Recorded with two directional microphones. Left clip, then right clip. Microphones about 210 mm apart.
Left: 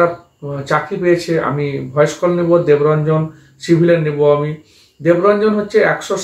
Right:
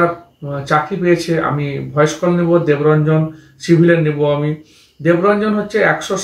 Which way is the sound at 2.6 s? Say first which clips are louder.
Left 1 dB; 5° left (ahead or behind).